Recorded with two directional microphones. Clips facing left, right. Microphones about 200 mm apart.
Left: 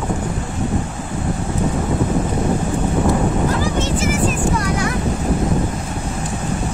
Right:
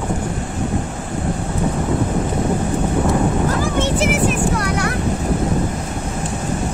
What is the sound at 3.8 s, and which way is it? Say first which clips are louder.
Vehicle: right 2 dB; 65° right (ahead or behind).